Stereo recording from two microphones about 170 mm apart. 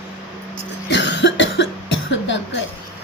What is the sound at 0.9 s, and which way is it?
Cough, 90° left.